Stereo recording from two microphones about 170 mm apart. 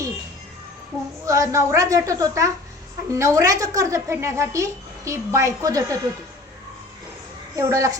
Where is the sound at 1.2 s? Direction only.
20° right (ahead or behind).